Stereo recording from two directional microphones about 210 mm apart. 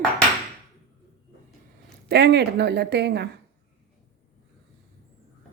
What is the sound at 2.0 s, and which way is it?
Speech, 50° right (ahead or behind).